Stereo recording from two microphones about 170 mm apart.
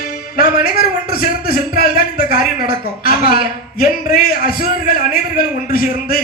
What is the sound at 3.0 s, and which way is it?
Speech, 60° left (ahead or behind).